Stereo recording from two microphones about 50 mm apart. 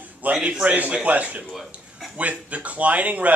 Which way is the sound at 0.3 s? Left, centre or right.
Right.